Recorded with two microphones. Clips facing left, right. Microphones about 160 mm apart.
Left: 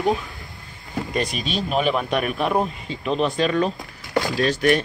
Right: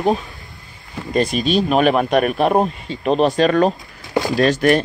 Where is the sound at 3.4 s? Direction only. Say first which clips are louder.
Right 6 dB; 55° right (ahead or behind).